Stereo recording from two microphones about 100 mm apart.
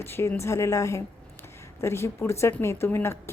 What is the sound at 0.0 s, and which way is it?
A woman's voice, 25° left (ahead or behind).